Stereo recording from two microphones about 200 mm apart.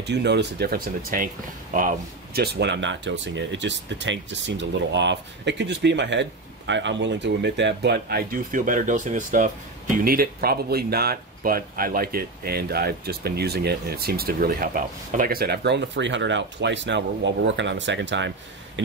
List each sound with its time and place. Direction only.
0.0 s speech: 60° right (ahead or behind)